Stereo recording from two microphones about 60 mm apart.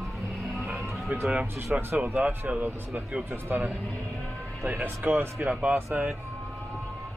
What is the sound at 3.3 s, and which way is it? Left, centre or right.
Speech, right.